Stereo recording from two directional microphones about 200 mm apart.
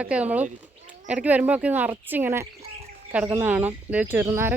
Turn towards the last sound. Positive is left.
turn(degrees=-10)  # may be behind; listen again after turning